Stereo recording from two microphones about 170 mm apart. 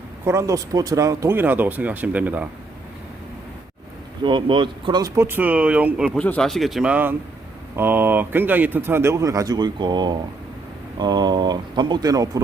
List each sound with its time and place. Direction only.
0.3 s speech: 20° right (ahead or behind)
4.2 s speech: 30° right (ahead or behind); by 6.1 s 5° right (ahead or behind)
6.1 s speech: 10° left (ahead or behind); by 12.4 s 20° right (ahead or behind)